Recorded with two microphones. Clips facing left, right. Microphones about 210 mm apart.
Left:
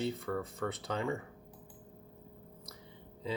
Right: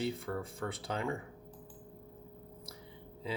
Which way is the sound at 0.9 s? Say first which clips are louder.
Left 1 dB; 15° right (ahead or behind).